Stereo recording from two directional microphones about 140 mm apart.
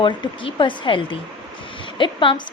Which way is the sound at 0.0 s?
35° left (ahead or behind).